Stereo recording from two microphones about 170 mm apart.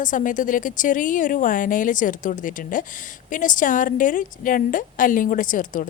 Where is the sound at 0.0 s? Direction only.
50° left (ahead or behind).